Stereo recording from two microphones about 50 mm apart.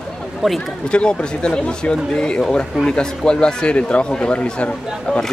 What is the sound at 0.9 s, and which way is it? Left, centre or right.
Speech, centre.